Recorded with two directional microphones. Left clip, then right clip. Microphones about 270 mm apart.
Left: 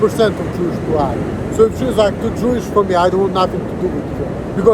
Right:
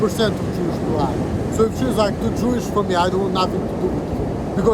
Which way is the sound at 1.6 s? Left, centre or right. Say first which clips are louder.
Left 6 dB; centre.